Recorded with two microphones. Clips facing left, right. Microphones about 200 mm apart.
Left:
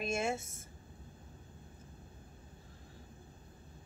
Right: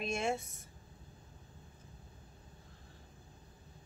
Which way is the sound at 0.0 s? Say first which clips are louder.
Even; 5° left (ahead or behind).